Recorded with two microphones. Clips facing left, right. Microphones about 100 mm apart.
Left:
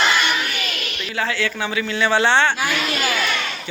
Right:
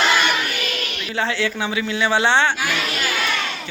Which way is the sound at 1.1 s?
25° right (ahead or behind).